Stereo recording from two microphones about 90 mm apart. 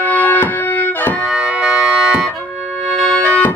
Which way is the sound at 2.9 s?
5° left (ahead or behind).